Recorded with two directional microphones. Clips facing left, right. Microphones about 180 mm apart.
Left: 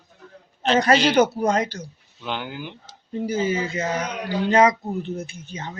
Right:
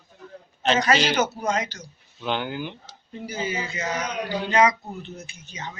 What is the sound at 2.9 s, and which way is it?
Speech, 45° left (ahead or behind).